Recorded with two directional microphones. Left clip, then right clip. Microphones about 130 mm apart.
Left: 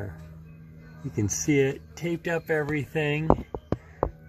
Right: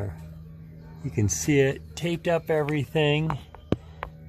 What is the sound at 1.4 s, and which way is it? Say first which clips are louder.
Speech: right 1 dB; 20° right (ahead or behind).